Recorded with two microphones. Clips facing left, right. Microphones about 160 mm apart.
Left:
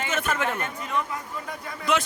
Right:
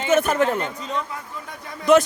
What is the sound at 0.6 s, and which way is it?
Speech, 25° right (ahead or behind).